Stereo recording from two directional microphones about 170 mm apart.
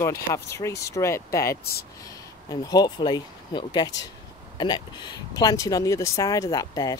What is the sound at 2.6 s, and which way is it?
Speech, 25° left (ahead or behind).